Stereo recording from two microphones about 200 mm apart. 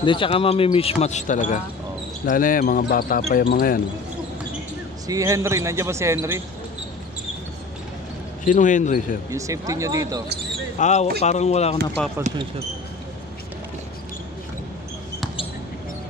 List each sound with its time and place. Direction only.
0.0 s speech: 25° left (ahead or behind); by 3.8 s 45° left (ahead or behind)
5.0 s speech: 15° right (ahead or behind)
8.5 s speech: 40° left (ahead or behind)
9.3 s speech: 15° right (ahead or behind)
10.8 s speech: 35° left (ahead or behind)